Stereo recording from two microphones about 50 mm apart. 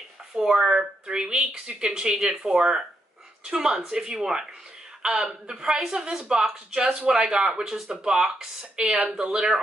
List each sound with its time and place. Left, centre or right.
0.4 s a woman's voice: centre